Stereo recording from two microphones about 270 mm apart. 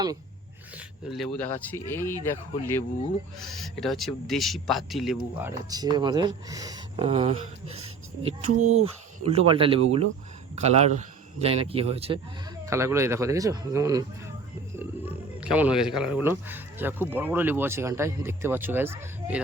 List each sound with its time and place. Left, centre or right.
0.8 s speech: centre; by 12.2 s right
12.6 s speech: centre
15.4 s speech: centre